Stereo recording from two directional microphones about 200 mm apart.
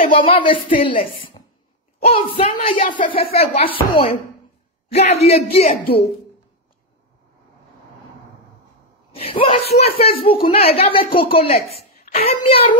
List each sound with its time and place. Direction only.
0.0 s a woman's voice: 25° left (ahead or behind)
3.0 s speech: 45° left (ahead or behind)
3.5 s a woman's voice: 30° left (ahead or behind)
4.9 s speech: 30° left (ahead or behind)
9.1 s a woman's voice: 30° left (ahead or behind)